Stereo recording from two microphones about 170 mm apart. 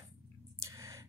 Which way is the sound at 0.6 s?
20° right (ahead or behind).